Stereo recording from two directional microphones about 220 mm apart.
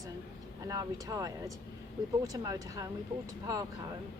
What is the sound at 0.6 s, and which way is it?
Speech, 15° right (ahead or behind).